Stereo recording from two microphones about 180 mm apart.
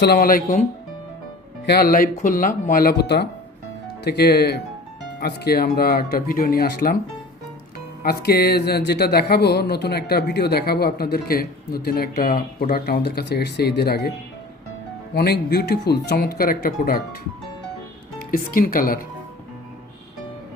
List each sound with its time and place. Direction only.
0.0 s speech: 60° left (ahead or behind)
1.6 s speech: 60° left (ahead or behind)
8.0 s speech: 60° left (ahead or behind)
15.1 s speech: 60° left (ahead or behind)
18.2 s speech: 50° left (ahead or behind)